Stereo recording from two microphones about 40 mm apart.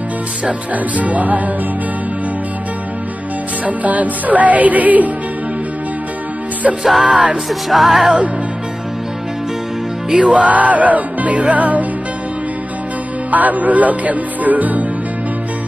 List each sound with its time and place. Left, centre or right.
0.5 s music: right
3.6 s music: right
7.1 s music: centre
7.7 s music: centre
10.0 s music: centre
10.3 s music: right
13.3 s speech: right